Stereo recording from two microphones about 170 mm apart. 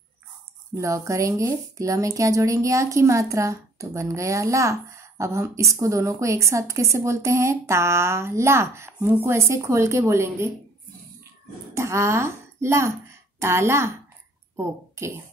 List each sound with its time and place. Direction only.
0.7 s a woman's voice: 20° right (ahead or behind)
11.7 s a woman's voice: 15° right (ahead or behind)